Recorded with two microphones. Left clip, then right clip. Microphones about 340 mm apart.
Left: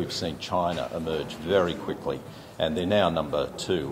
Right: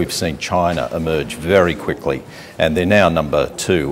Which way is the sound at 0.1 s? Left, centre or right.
Right.